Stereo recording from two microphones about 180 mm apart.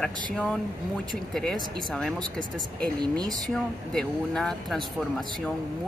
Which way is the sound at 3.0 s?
20° right (ahead or behind).